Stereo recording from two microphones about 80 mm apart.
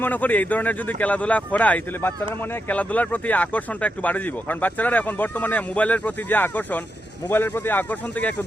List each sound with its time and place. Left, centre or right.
0.0 s speech: left